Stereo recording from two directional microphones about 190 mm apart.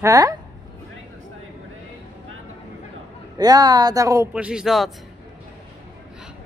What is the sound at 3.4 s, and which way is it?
Speech, 20° right (ahead or behind).